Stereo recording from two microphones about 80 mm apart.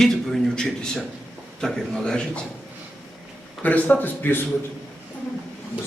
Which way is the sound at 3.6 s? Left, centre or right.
Left.